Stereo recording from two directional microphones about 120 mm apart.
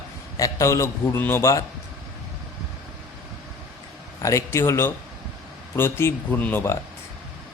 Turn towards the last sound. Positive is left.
turn(degrees=15)  # may be behind; listen again after turning